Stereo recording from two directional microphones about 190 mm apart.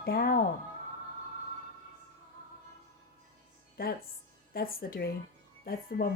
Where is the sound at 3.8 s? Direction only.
50° left (ahead or behind).